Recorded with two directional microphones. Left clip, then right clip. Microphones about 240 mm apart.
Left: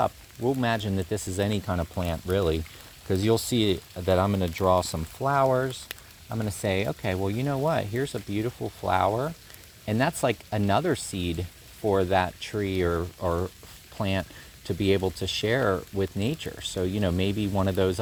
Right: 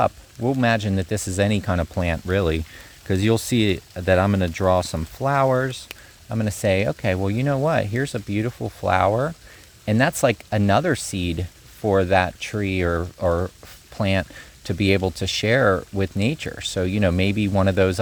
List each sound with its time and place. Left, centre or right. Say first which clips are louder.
0.0 s speech: right 5 dB; right